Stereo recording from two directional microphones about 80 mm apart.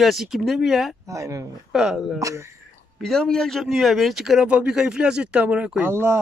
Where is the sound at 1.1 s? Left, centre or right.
Right.